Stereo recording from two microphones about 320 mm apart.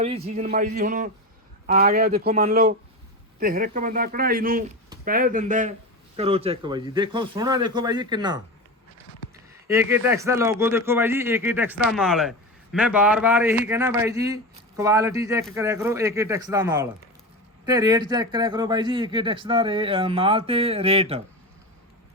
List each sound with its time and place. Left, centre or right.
0.0 s speech: centre
9.6 s speech: centre